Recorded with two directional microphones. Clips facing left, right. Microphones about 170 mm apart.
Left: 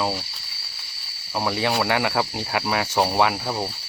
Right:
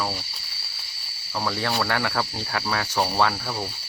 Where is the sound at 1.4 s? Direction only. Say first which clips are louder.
Left 3 dB; 15° left (ahead or behind).